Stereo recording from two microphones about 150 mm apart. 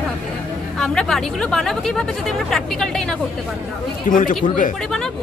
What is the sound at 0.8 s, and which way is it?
A woman's voice, 5° left (ahead or behind).